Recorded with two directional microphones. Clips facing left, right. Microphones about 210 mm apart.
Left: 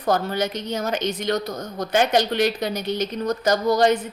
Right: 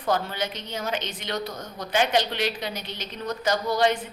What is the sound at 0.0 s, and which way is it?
A woman's voice, 45° left (ahead or behind).